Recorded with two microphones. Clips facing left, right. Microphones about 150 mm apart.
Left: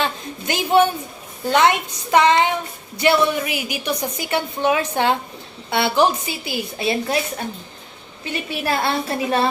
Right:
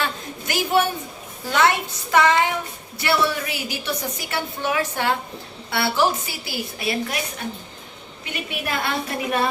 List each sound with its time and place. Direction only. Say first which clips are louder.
0.0 s a sound: left 3 dB; 20° left (ahead or behind)
1.5 s a woman's voice: left 3 dB; 20° left (ahead or behind)
8.2 s a woman's voice: left 4 dB; 30° left (ahead or behind)